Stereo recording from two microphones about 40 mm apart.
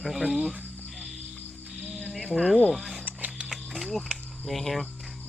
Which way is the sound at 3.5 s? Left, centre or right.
Centre.